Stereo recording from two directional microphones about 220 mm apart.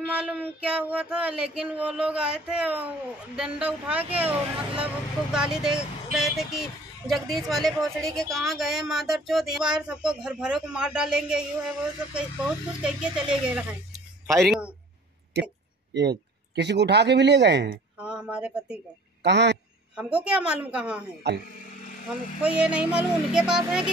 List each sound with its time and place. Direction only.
0.0 s speech: 5° right (ahead or behind)
15.9 s speech: 50° right (ahead or behind)
18.0 s speech: 5° right (ahead or behind)
19.2 s speech: 50° right (ahead or behind)
20.0 s speech: 5° right (ahead or behind)
22.4 s speech: 5° right (ahead or behind)